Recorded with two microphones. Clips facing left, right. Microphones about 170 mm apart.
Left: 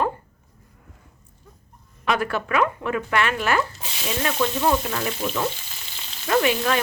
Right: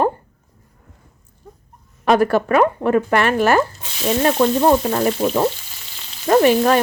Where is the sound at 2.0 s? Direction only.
40° right (ahead or behind).